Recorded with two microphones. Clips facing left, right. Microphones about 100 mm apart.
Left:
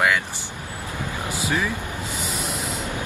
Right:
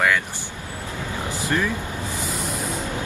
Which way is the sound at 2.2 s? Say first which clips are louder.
Right 1 dB; 75° left (ahead or behind).